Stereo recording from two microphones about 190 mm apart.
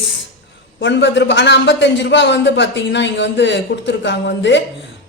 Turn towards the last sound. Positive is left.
turn(degrees=70)  # may be behind; listen again after turning